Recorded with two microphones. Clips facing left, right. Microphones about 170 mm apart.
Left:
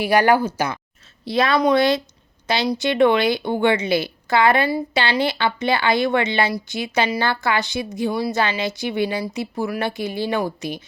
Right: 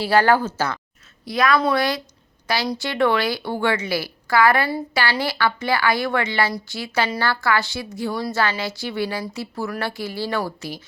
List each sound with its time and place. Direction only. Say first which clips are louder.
0.0 s speech: left 1 dB; 15° left (ahead or behind)
1.2 s a woman's voice: left 1 dB; 25° left (ahead or behind)